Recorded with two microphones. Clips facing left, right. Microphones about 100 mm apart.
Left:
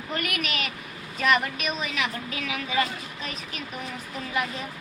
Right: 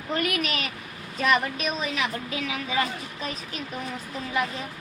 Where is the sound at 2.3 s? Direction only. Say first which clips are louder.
Even; 25° right (ahead or behind).